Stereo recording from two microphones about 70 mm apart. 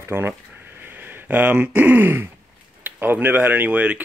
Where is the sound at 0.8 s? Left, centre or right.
Right.